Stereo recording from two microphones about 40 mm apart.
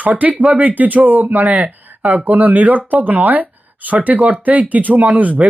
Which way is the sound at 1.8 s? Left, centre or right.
Right.